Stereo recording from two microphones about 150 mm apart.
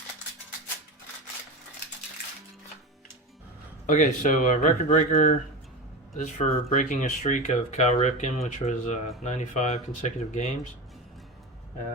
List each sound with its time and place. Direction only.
3.8 s speech: 60° left (ahead or behind)